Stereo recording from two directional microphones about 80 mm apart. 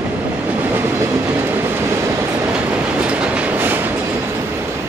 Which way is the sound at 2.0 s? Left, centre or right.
Right.